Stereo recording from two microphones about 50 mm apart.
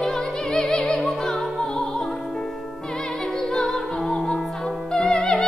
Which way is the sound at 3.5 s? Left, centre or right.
Centre.